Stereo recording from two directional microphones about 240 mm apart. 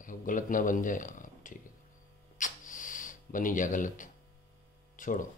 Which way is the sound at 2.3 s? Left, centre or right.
Left.